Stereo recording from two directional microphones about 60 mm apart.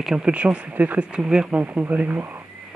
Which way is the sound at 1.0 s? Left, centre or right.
Centre.